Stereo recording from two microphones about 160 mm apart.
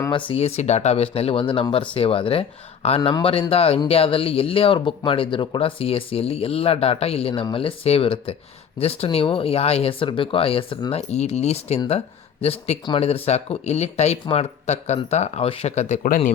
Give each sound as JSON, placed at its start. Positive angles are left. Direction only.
{"t": 0.3, "sound": "speech", "side_deg": 40}